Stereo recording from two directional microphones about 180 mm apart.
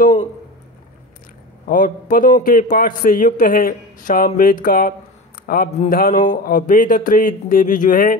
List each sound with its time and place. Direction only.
1.7 s speech: 50° left (ahead or behind)